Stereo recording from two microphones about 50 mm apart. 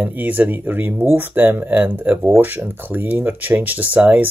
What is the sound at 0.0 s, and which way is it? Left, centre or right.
Speech, right.